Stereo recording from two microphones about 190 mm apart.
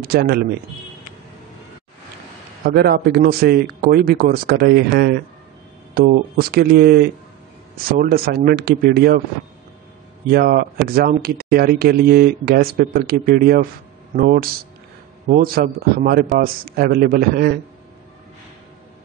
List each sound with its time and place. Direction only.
0.0 s speech: 55° right (ahead or behind)
2.6 s speech: 55° right (ahead or behind)
10.3 s speech: 50° right (ahead or behind)